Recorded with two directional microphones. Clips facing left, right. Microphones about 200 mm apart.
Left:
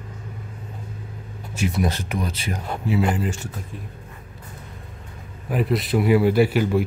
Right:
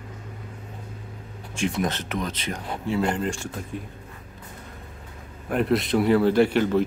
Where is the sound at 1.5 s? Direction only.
5° left (ahead or behind).